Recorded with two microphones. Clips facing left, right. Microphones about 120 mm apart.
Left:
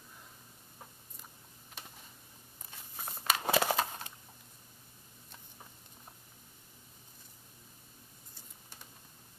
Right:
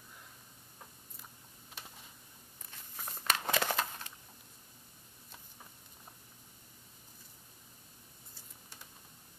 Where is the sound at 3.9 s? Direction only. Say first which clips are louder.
Left 3 dB; 20° left (ahead or behind).